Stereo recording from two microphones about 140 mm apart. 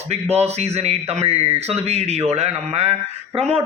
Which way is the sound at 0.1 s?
50° right (ahead or behind).